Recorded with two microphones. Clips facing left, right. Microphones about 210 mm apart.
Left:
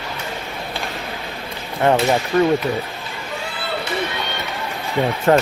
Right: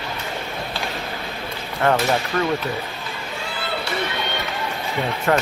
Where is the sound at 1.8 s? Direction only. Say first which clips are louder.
Left 3 dB; 20° left (ahead or behind).